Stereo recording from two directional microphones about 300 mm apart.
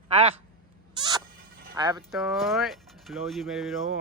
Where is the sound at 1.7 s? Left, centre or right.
Centre.